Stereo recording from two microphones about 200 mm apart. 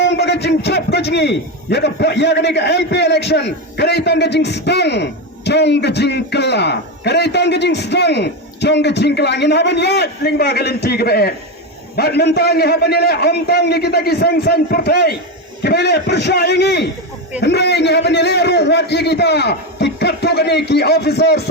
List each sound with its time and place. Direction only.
0.0 s a man's voice: 60° left (ahead or behind)